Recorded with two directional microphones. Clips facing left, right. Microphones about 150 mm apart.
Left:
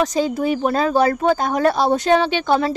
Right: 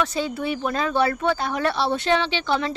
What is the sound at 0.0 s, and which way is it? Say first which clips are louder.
Speech: left 6 dB; 40° left (ahead or behind).